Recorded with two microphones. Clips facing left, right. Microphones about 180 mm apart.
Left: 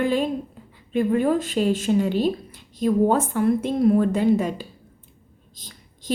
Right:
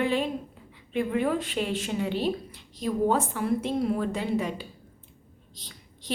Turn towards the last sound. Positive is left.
turn(degrees=45)  # may be behind; listen again after turning